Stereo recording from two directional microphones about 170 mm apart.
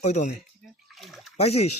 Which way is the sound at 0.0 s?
40° left (ahead or behind).